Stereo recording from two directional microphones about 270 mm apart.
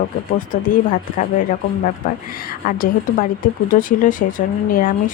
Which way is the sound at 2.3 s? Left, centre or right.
Left.